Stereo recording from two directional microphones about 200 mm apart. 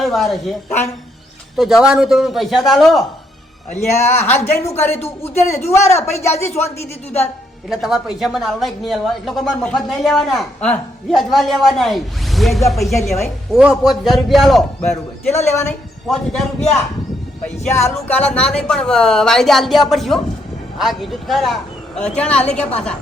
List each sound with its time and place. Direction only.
0.0 s speech: centre (ahead or behind)
1.5 s speech: centre (ahead or behind)
4.3 s a woman's voice: 10° left (ahead or behind)
6.0 s speech: 35° left (ahead or behind)
7.7 s speech: centre (ahead or behind)
12.9 s a woman's voice: 15° left (ahead or behind)
13.5 s a woman's voice: 5° right (ahead or behind); by 15.7 s 15° left (ahead or behind)
16.0 s speech: centre (ahead or behind)
17.8 s speech: 5° left (ahead or behind)